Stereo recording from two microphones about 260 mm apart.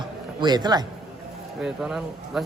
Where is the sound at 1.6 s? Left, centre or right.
Centre.